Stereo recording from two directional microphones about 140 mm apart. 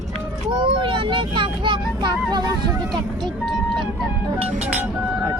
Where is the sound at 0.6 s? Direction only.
35° right (ahead or behind).